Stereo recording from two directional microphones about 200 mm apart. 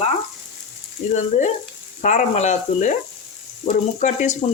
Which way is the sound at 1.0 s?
35° left (ahead or behind).